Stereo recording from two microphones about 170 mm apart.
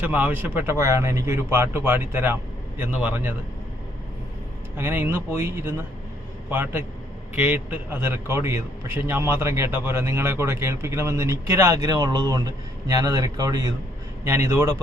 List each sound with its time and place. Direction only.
0.0 s a man's voice: 10° right (ahead or behind)
4.8 s a man's voice: 15° right (ahead or behind)